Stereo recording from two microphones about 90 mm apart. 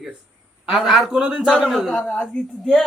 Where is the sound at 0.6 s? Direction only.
5° right (ahead or behind).